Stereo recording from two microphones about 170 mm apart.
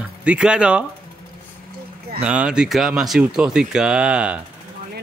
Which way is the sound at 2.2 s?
5° right (ahead or behind).